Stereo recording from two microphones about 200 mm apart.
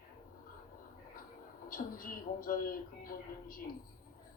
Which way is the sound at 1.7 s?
45° left (ahead or behind).